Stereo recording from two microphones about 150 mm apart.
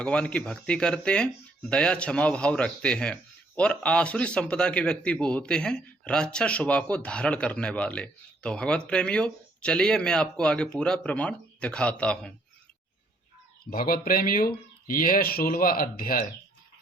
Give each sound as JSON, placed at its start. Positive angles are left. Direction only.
{"t": 0.0, "sound": "a man's voice", "side_deg": 5}
{"t": 13.7, "sound": "speech", "side_deg": 70}